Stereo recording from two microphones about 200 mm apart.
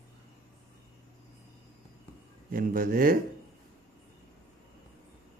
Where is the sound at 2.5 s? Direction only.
45° right (ahead or behind).